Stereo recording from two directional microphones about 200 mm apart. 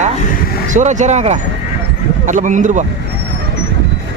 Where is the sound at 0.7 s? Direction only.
35° right (ahead or behind).